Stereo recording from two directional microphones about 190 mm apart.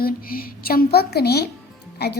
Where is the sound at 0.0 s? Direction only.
50° left (ahead or behind).